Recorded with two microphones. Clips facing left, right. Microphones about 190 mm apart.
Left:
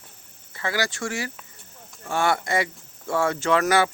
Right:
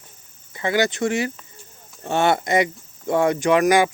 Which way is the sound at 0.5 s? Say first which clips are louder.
Right 7 dB; 20° right (ahead or behind).